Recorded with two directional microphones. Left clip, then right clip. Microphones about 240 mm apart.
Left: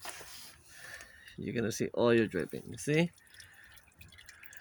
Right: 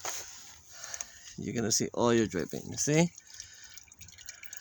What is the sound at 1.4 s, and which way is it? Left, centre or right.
Speech, centre.